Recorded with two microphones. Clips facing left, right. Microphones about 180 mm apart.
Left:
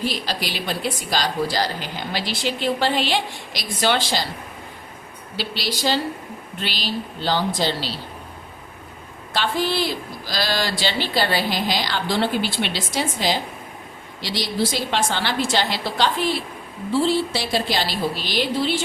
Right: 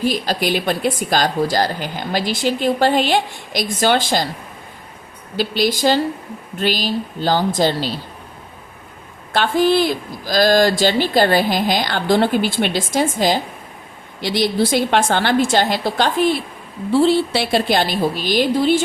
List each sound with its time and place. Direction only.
0.0 s a woman's voice: 45° right (ahead or behind)
5.4 s a woman's voice: 50° right (ahead or behind)
9.3 s a woman's voice: 50° right (ahead or behind)
16.9 s a woman's voice: 60° right (ahead or behind); by 18.8 s 45° right (ahead or behind)